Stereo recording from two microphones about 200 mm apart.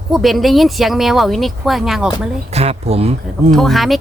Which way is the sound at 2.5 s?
30° right (ahead or behind).